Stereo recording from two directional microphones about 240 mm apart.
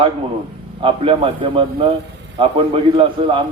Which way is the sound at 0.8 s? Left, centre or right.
Right.